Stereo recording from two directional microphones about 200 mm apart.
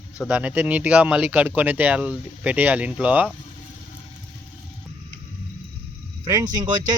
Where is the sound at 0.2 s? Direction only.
5° right (ahead or behind).